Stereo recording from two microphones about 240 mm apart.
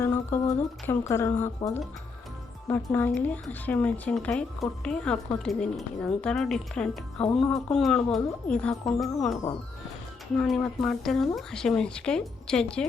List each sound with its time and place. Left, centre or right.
0.0 s speech: centre